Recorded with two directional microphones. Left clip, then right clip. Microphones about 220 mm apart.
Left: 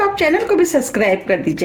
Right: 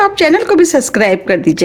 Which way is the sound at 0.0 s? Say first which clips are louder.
Right 5 dB; 45° right (ahead or behind).